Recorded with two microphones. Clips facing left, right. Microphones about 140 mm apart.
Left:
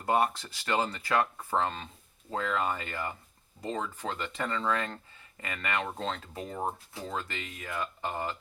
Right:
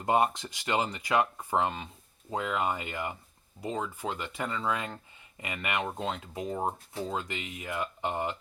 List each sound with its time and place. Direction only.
0.0 s speech: 20° right (ahead or behind)